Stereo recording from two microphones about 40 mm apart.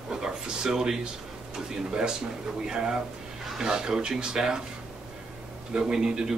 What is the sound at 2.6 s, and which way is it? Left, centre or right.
Speech, centre.